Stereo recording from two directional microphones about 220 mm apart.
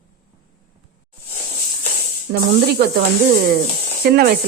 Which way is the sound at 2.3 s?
50° right (ahead or behind).